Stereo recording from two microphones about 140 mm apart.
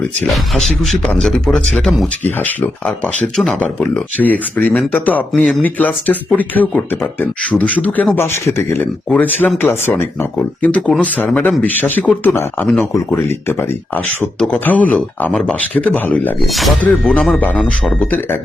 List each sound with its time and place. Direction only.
0.8 s speech: 5° left (ahead or behind)
16.5 s speech: centre (ahead or behind)